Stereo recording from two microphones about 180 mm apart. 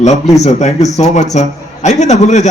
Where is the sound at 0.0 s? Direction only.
40° left (ahead or behind).